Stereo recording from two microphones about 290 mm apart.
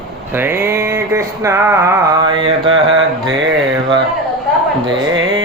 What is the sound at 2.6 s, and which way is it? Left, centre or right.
Mantra, right.